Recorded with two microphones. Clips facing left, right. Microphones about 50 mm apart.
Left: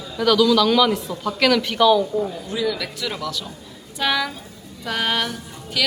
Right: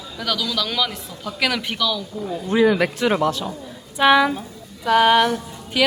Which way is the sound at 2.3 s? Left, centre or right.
Right.